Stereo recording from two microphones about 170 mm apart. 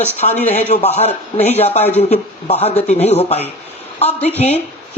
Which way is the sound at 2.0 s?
35° left (ahead or behind).